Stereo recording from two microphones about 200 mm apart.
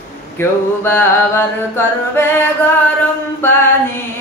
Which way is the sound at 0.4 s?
10° left (ahead or behind).